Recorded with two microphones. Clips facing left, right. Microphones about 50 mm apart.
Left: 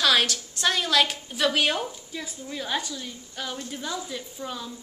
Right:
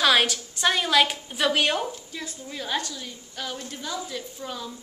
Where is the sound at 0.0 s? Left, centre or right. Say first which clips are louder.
Right 2 dB; centre.